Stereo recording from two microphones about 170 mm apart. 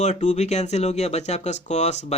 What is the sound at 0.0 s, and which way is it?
Speech, 45° left (ahead or behind).